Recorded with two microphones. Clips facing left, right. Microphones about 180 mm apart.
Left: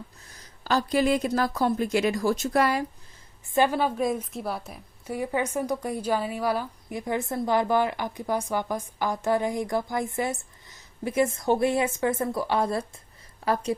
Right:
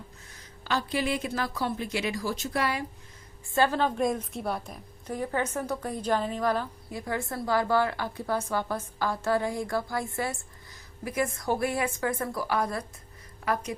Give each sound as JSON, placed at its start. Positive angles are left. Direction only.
{"t": 0.6, "sound": "a woman's voice", "side_deg": 40}
{"t": 3.4, "sound": "a woman's voice", "side_deg": 15}